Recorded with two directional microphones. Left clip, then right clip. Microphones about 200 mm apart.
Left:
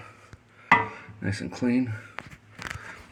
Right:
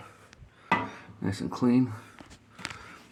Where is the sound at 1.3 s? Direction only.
10° right (ahead or behind).